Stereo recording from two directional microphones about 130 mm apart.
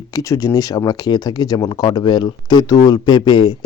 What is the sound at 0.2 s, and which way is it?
Speech, 25° left (ahead or behind).